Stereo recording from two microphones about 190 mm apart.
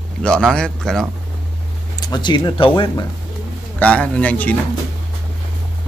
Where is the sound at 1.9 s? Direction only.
20° left (ahead or behind).